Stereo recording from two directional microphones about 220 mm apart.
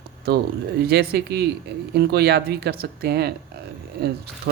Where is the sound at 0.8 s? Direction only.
45° right (ahead or behind).